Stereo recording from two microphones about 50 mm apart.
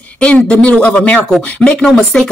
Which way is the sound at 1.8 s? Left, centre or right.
Centre.